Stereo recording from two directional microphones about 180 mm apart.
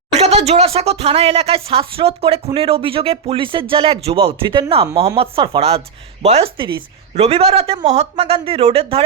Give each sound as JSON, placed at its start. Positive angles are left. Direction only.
{"t": 0.1, "sound": "speech", "side_deg": -35}